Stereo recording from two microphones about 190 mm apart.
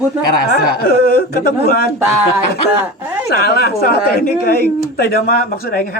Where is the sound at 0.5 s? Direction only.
55° left (ahead or behind).